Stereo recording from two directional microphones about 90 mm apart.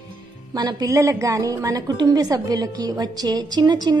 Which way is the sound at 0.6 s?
50° right (ahead or behind).